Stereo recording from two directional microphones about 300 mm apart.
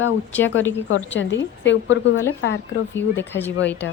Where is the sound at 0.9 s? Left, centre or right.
Left.